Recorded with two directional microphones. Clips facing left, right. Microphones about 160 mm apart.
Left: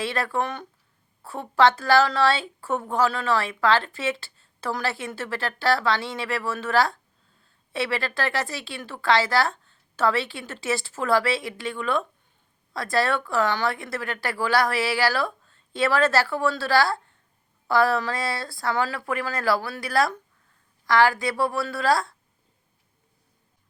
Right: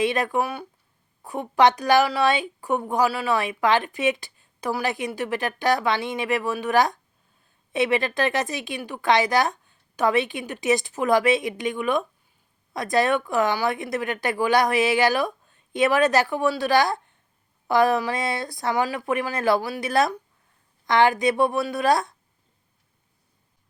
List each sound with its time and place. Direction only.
0.0 s a woman's voice: 20° right (ahead or behind)